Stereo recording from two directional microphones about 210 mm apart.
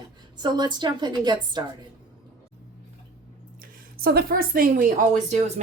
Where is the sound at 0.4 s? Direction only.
20° right (ahead or behind).